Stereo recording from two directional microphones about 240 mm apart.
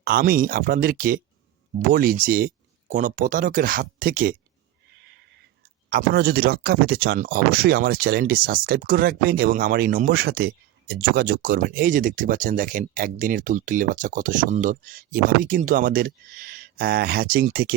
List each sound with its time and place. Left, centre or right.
0.0 s speech: right
5.9 s speech: right